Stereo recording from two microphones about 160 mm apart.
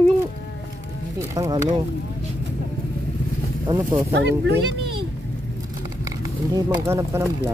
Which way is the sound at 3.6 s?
20° right (ahead or behind).